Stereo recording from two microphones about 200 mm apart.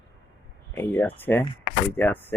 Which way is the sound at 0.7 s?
10° left (ahead or behind).